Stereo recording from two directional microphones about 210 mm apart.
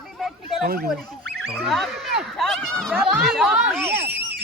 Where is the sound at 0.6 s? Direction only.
45° right (ahead or behind).